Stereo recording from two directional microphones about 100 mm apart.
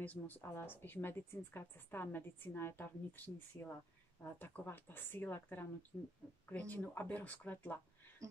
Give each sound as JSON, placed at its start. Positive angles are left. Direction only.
{"t": 0.0, "sound": "speech", "side_deg": 20}